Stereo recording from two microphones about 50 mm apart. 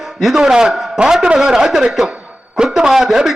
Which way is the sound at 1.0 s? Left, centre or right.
Centre.